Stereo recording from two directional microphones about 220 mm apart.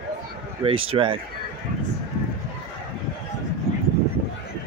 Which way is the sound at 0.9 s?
25° right (ahead or behind).